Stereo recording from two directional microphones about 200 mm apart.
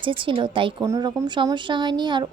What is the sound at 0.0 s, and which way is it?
A woman's voice, 25° right (ahead or behind).